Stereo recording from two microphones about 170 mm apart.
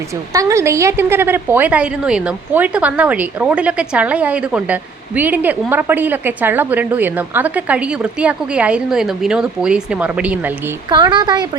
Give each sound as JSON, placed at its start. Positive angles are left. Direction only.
{"t": 0.3, "sound": "a woman's voice", "side_deg": -20}
{"t": 10.8, "sound": "speech", "side_deg": -25}